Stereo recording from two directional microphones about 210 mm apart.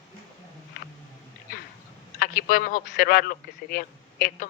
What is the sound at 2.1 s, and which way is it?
A man's voice, 45° left (ahead or behind).